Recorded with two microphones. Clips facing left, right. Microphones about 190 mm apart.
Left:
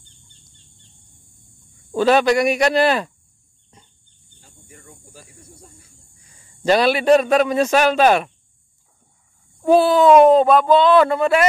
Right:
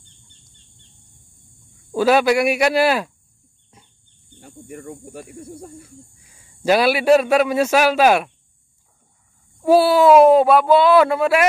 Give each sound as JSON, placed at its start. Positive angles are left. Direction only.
{"t": 2.0, "sound": "speech", "side_deg": -5}
{"t": 4.4, "sound": "speech", "side_deg": -65}
{"t": 6.2, "sound": "a man's voice", "side_deg": -5}
{"t": 9.6, "sound": "speech", "side_deg": -5}